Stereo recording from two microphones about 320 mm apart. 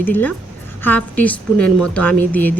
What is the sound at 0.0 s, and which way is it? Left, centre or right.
A woman's voice, centre.